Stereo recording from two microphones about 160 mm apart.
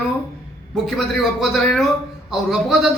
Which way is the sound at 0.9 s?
Centre (ahead or behind).